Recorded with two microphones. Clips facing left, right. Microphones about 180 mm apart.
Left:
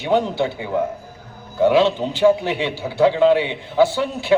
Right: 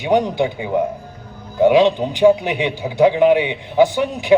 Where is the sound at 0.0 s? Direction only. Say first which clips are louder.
Right 2 dB; 15° right (ahead or behind).